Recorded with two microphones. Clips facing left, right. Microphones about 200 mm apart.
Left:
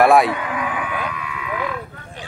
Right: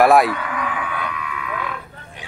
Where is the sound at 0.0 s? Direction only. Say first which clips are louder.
Even; centre (ahead or behind).